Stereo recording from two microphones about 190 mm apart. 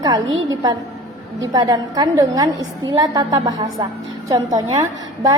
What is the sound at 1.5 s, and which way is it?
A woman's voice, 20° right (ahead or behind).